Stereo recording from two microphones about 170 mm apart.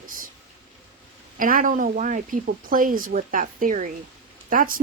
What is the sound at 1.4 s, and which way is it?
Speech, 50° right (ahead or behind).